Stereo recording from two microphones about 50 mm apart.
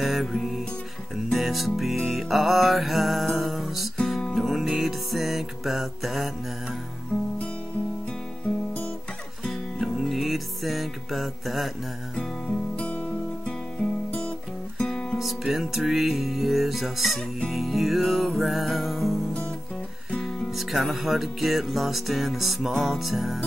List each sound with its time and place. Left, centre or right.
0.0 s music: centre
9.4 s music: centre
12.7 s music: left
14.9 s music: centre
15.1 s music: centre
20.2 s music: centre